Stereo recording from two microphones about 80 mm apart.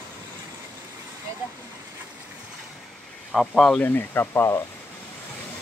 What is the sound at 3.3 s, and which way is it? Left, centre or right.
Speech, centre.